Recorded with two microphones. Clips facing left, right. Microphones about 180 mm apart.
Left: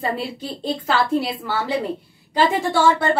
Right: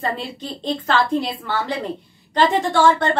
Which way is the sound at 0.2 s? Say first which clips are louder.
Left 2 dB; 5° left (ahead or behind).